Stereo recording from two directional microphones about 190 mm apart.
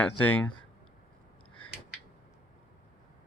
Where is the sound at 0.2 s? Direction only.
5° left (ahead or behind).